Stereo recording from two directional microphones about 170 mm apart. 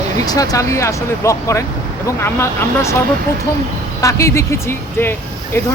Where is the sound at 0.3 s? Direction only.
20° left (ahead or behind).